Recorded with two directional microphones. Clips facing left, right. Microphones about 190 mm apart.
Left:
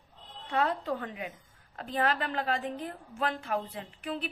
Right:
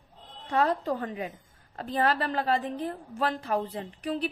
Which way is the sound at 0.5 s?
40° right (ahead or behind).